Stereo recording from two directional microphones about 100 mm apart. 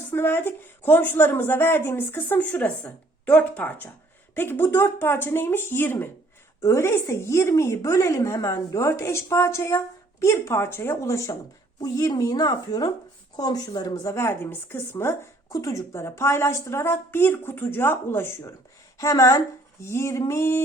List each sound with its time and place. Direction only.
0.1 s a woman's voice: 20° left (ahead or behind)